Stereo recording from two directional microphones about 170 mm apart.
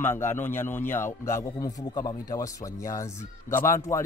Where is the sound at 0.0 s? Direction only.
15° left (ahead or behind).